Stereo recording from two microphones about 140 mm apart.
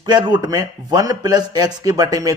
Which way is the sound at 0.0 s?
30° right (ahead or behind).